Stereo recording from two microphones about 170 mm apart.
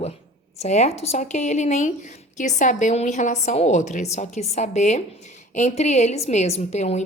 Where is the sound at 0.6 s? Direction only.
40° left (ahead or behind).